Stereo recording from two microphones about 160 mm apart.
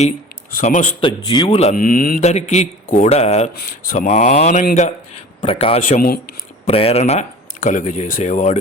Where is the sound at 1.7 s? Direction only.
60° left (ahead or behind).